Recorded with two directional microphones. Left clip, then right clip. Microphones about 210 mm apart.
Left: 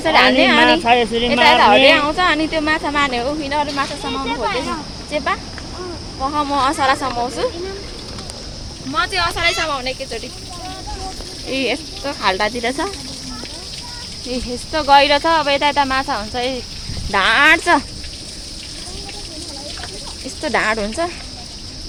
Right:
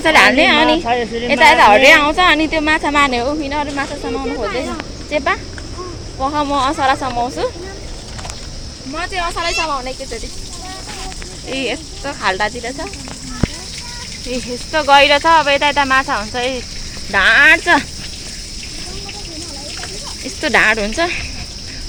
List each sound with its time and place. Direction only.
0.0 s speech: 15° right (ahead or behind)
0.6 s speech: 55° left (ahead or behind)
1.3 s speech: 15° right (ahead or behind)
5.1 s speech: 15° right (ahead or behind)
9.1 s speech: 10° left (ahead or behind)
11.5 s speech: 5° left (ahead or behind)
12.6 s speech: 25° left (ahead or behind)
14.3 s speech: 5° left (ahead or behind)
20.4 s speech: 5° right (ahead or behind)